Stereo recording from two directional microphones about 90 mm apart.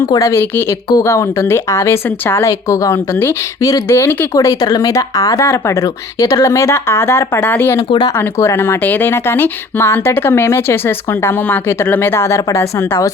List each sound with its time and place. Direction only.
0.2 s speech: 30° left (ahead or behind)
2.4 s speech: 40° left (ahead or behind)
4.4 s speech: 45° left (ahead or behind); by 7.8 s 25° left (ahead or behind)
7.9 s speech: 55° left (ahead or behind)
8.4 s speech: 30° left (ahead or behind)